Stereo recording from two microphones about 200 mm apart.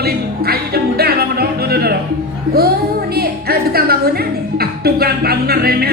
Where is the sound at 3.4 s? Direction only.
50° right (ahead or behind).